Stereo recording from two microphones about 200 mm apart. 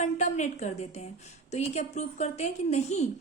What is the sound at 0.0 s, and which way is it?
A woman's voice, 35° left (ahead or behind).